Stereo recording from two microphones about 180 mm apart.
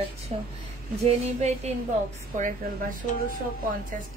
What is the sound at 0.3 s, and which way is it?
A woman's voice, 40° right (ahead or behind).